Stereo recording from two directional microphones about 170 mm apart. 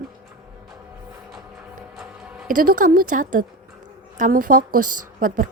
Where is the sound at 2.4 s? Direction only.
55° right (ahead or behind).